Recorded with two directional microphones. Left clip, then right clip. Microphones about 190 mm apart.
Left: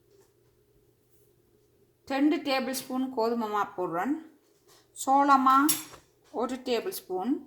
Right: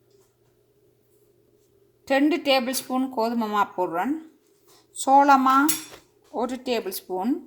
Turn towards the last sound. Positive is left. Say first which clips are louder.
# right 4 dB
turn(degrees=-30)  # may be behind; listen again after turning